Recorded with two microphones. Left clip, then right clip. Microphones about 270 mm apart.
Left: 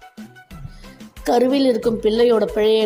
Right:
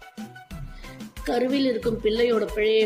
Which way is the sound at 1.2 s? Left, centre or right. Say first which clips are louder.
Left 8 dB; left.